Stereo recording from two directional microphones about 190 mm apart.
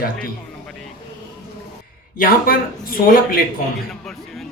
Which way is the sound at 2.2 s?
50° left (ahead or behind).